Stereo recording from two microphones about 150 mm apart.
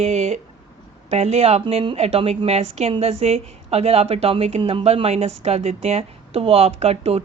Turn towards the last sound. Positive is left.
turn(degrees=-45)  # may be behind; listen again after turning